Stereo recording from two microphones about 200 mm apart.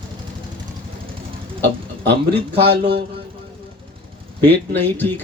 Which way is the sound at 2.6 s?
55° right (ahead or behind).